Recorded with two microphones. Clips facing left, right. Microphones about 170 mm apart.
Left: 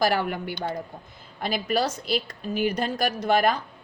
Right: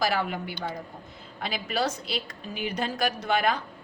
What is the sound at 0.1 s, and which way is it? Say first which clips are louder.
A woman's voice: left 3 dB; 55° left (ahead or behind).